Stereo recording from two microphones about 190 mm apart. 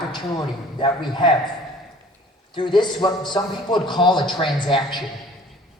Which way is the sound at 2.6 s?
25° left (ahead or behind).